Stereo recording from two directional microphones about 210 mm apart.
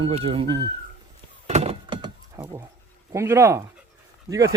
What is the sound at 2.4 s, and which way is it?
Dog, 15° right (ahead or behind).